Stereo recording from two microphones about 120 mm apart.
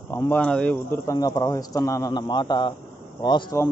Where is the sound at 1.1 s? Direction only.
30° left (ahead or behind).